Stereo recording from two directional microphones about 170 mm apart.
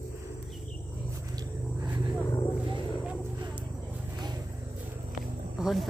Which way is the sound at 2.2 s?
25° left (ahead or behind).